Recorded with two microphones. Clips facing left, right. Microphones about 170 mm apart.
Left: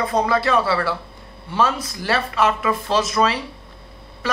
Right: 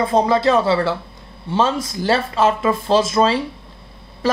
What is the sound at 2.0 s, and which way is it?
Speech, 25° right (ahead or behind).